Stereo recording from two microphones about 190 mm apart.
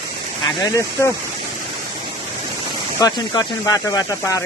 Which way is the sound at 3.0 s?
20° left (ahead or behind).